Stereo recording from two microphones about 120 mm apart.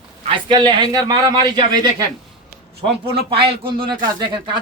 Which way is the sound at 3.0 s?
50° right (ahead or behind).